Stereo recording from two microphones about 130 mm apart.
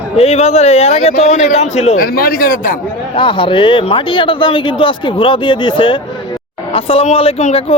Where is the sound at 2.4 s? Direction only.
90° left.